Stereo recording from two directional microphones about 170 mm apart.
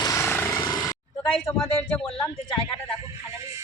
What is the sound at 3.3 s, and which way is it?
Music, 15° right (ahead or behind).